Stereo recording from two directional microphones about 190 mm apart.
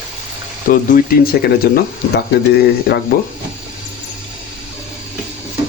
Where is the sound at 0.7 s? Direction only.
45° left (ahead or behind).